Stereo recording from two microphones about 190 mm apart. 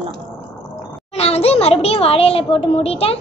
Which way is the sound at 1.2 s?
35° left (ahead or behind).